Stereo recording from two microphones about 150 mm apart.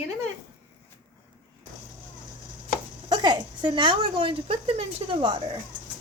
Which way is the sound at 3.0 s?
30° right (ahead or behind).